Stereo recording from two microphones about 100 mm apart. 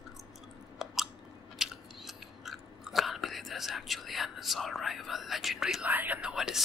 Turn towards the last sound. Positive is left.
turn(degrees=-5)  # may be behind; listen again after turning